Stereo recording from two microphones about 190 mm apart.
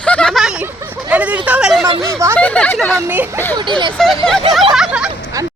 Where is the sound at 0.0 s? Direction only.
5° left (ahead or behind).